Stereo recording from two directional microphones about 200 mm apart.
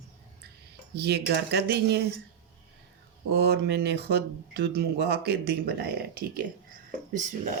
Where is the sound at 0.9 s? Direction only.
55° right (ahead or behind).